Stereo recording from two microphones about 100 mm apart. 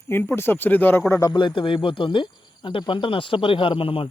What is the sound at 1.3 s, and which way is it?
Speech, 50° left (ahead or behind).